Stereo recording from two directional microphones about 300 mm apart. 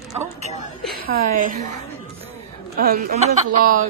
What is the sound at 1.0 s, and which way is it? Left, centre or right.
Speech, right.